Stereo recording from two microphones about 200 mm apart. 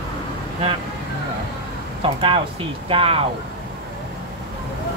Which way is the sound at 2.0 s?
25° right (ahead or behind).